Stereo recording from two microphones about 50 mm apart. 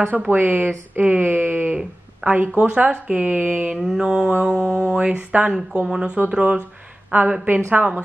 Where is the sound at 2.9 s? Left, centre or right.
Right.